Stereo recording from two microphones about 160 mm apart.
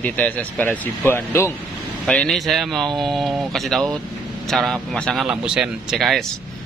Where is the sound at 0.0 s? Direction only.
10° left (ahead or behind).